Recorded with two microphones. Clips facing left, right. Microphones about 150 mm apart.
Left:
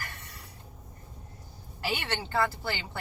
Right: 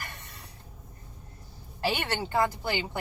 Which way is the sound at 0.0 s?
20° right (ahead or behind).